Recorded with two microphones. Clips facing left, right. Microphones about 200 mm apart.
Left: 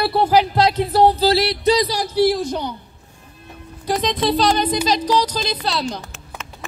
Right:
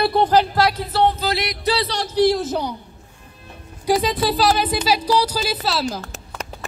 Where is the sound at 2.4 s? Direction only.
5° right (ahead or behind).